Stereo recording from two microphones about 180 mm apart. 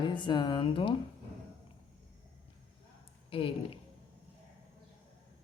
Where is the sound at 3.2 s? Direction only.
30° left (ahead or behind).